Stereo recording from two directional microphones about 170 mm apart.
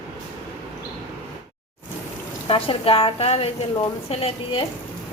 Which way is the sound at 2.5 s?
35° left (ahead or behind).